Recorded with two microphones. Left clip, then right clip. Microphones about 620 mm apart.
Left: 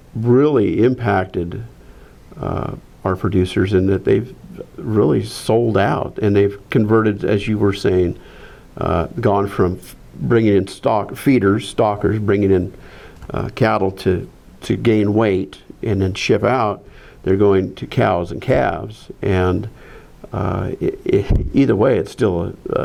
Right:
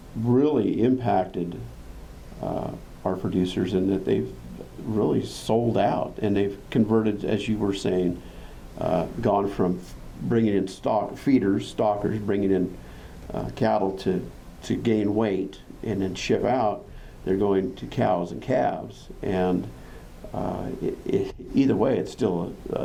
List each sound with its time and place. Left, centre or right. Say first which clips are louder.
0.3 s speech: left 8 dB; left
3.0 s speech: left 8 dB; left